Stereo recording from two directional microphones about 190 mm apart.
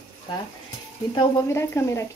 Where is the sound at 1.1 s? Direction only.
15° left (ahead or behind).